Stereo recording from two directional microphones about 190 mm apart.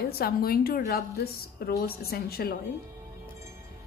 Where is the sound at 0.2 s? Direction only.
50° left (ahead or behind).